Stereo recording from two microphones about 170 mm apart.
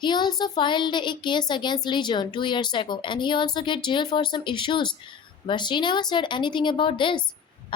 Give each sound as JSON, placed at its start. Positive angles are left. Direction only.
{"t": 0.0, "sound": "a child's voice", "side_deg": 25}